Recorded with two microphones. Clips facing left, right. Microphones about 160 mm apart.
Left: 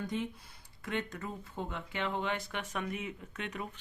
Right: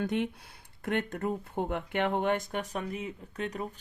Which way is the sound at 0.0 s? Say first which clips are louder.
Right 6 dB; 65° right (ahead or behind).